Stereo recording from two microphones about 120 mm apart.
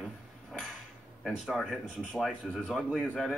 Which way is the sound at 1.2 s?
5° right (ahead or behind).